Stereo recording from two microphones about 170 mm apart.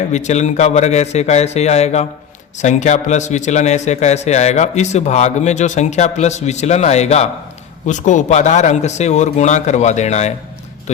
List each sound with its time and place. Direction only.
0.1 s a man's voice: 45° left (ahead or behind)